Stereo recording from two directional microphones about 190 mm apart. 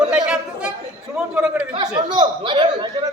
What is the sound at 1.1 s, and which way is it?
Speech, 5° right (ahead or behind).